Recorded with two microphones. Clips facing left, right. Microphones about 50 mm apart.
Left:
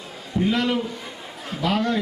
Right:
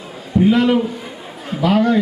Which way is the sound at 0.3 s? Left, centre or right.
Centre.